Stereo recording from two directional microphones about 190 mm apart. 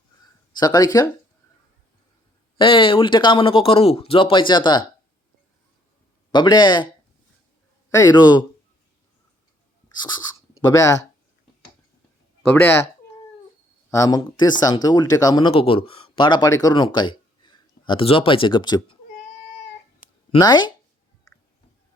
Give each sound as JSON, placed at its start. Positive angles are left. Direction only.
{"t": 0.5, "sound": "speech", "side_deg": 20}
{"t": 2.6, "sound": "speech", "side_deg": 25}
{"t": 6.3, "sound": "speech", "side_deg": 25}
{"t": 7.9, "sound": "speech", "side_deg": 15}
{"t": 10.0, "sound": "speech", "side_deg": 20}
{"t": 12.5, "sound": "speech", "side_deg": 10}
{"t": 13.9, "sound": "speech", "side_deg": 20}
{"t": 20.3, "sound": "speech", "side_deg": 20}